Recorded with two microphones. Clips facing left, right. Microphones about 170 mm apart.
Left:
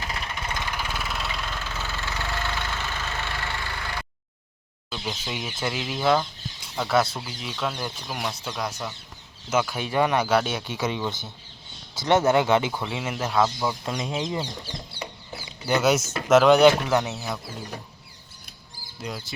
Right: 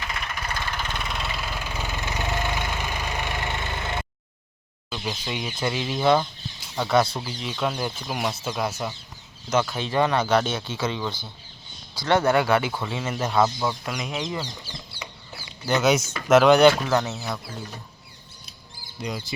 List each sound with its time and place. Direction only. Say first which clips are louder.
0.0 s vehicle: even; 30° left (ahead or behind); by 4.0 s 20° right (ahead or behind)
4.9 s speech: right 2 dB; centre (ahead or behind)
9.5 s speech: right 1 dB; 10° left (ahead or behind)
13.8 s speech: left 1 dB; 25° left (ahead or behind)
15.4 s speech: even; 10° left (ahead or behind)
18.9 s speech: right 3 dB; centre (ahead or behind)